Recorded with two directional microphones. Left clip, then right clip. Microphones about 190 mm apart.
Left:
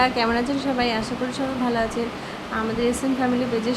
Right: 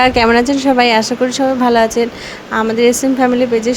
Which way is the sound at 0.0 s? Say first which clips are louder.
Right 10 dB; 45° right (ahead or behind).